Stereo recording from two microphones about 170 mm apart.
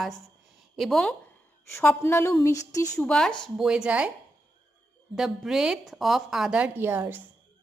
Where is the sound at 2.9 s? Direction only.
5° left (ahead or behind).